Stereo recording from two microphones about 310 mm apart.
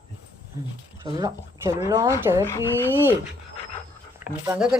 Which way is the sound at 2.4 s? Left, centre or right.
Centre.